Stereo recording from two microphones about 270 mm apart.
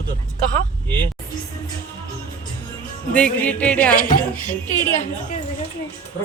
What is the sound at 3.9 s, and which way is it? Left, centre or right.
Speech, left.